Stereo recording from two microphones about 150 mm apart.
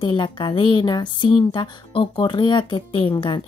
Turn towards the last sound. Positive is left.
turn(degrees=35)  # may be behind; listen again after turning